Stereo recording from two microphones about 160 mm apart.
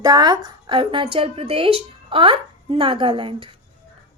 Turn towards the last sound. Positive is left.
turn(degrees=-30)  # may be behind; listen again after turning